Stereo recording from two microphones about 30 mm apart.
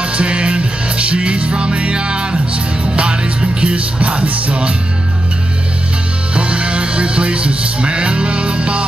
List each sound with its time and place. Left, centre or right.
0.0 s music: right
3.7 s music: right
6.3 s music: right